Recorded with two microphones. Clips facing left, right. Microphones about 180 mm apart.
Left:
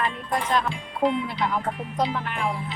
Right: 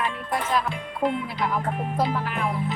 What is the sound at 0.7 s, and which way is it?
Speech, 55° right (ahead or behind).